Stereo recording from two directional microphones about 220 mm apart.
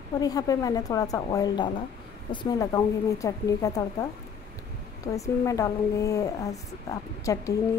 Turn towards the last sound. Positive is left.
turn(degrees=15)  # may be behind; listen again after turning